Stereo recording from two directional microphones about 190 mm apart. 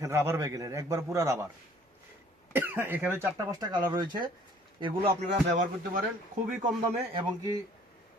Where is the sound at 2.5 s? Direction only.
10° right (ahead or behind).